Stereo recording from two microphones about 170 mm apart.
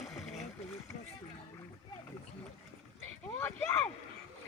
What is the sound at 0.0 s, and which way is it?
Boat, centre (ahead or behind).